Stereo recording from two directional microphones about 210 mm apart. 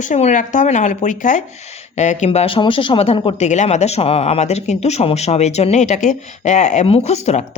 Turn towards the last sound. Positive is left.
turn(degrees=30)  # may be behind; listen again after turning